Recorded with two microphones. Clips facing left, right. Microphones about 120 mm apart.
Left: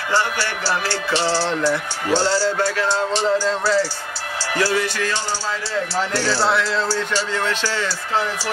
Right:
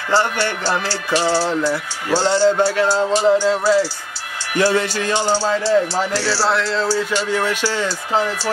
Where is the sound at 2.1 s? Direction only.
20° right (ahead or behind).